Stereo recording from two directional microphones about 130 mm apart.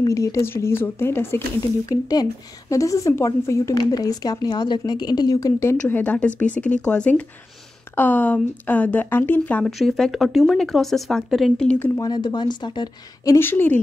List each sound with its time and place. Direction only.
0.0 s a woman's voice: 25° left (ahead or behind)
1.9 s a woman's voice: 30° left (ahead or behind)
5.8 s speech: 15° left (ahead or behind)
9.7 s speech: centre (ahead or behind)
12.0 s a woman's voice: 35° left (ahead or behind); by 13.7 s 15° left (ahead or behind)